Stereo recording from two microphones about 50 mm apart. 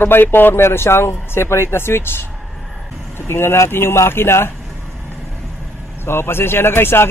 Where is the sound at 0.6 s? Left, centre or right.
Left.